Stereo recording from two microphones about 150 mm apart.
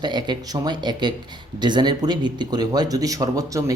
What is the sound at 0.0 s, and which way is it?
Speech, 30° right (ahead or behind).